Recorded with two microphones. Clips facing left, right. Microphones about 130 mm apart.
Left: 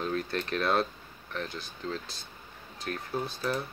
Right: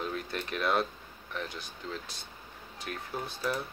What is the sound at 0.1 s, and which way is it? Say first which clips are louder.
Speech: left 4 dB; 15° right (ahead or behind).